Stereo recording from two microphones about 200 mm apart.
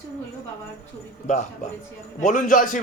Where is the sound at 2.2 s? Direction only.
40° left (ahead or behind).